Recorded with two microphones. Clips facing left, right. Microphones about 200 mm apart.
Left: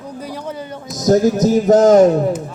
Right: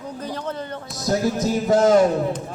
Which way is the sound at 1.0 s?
45° left (ahead or behind).